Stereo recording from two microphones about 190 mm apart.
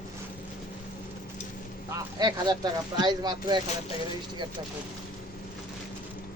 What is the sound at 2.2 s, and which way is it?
Speech, 20° right (ahead or behind).